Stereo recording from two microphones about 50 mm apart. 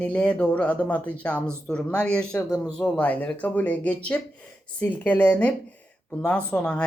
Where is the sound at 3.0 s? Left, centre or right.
Left.